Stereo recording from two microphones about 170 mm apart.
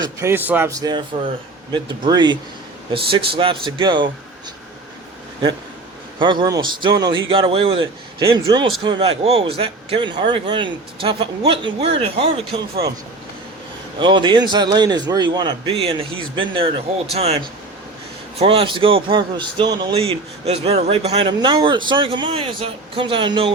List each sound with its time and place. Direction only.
0.0 s a man's voice: 15° right (ahead or behind)
6.1 s a man's voice: 25° right (ahead or behind)
14.0 s a man's voice: 25° right (ahead or behind)
18.3 s a man's voice: 30° right (ahead or behind)